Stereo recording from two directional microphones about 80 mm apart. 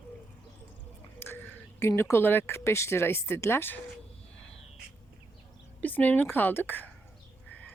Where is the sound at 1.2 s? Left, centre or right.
Left.